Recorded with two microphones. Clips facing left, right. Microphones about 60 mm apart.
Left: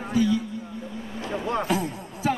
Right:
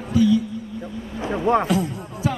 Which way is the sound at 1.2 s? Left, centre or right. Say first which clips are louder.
Right 8 dB; right.